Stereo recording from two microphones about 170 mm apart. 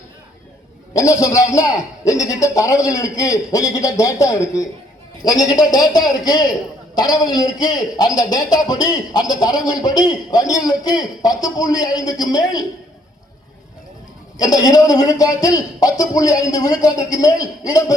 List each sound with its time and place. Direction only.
0.9 s a man's voice: 20° left (ahead or behind)
14.3 s a man's voice: 20° left (ahead or behind)